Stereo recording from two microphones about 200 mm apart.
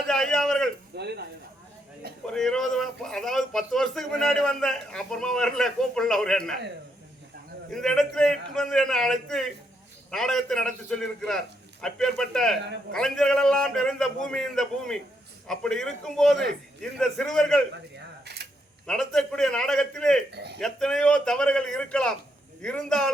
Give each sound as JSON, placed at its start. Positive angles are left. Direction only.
{"t": 0.1, "sound": "a sound", "side_deg": 5}
{"t": 0.9, "sound": "speech", "side_deg": -55}
{"t": 2.3, "sound": "a man's voice", "side_deg": 0}
{"t": 7.7, "sound": "a man's voice", "side_deg": 0}
{"t": 18.3, "sound": "camera", "side_deg": -55}
{"t": 18.9, "sound": "a man's voice", "side_deg": 5}
{"t": 20.3, "sound": "speech", "side_deg": -60}
{"t": 20.6, "sound": "a man's voice", "side_deg": 5}